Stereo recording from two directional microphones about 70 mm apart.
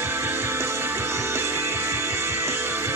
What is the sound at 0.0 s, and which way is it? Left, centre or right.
Music, right.